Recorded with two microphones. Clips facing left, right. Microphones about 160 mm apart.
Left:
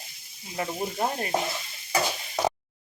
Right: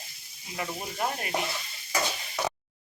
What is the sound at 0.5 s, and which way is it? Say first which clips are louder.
Stir: left 5 dB; 30° left (ahead or behind).